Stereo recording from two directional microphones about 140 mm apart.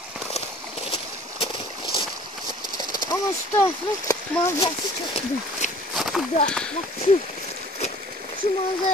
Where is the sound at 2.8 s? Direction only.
30° left (ahead or behind).